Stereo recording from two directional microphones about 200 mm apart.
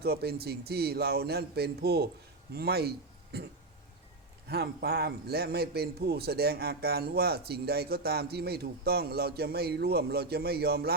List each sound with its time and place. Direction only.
0.0 s a man's voice: 50° right (ahead or behind)
4.4 s a man's voice: 55° right (ahead or behind)